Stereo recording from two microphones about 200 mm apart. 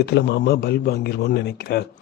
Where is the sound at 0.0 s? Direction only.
55° left (ahead or behind).